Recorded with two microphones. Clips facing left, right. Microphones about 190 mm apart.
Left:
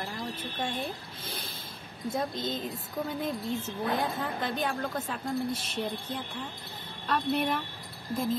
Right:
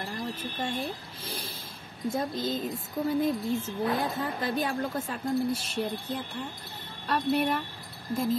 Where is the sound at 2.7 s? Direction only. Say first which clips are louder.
Right 6 dB; 10° right (ahead or behind).